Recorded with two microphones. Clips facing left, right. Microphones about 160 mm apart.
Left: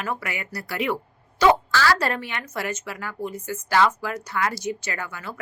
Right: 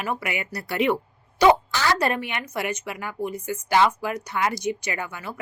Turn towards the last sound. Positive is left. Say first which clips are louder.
# right 1 dB
turn(degrees=-15)  # may be behind; listen again after turning